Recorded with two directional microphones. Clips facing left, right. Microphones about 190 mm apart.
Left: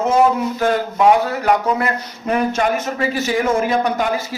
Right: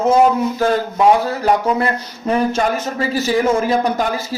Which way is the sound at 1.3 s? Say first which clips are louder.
Right 1 dB; 30° right (ahead or behind).